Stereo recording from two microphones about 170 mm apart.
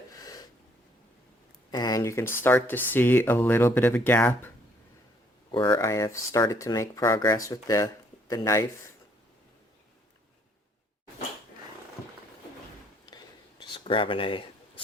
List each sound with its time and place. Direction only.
0.1 s snort: 20° left (ahead or behind)
1.7 s speech: 20° left (ahead or behind)
5.5 s speech: 30° left (ahead or behind)
5.8 s speech: 15° left (ahead or behind)
13.1 s a sound: 25° left (ahead or behind)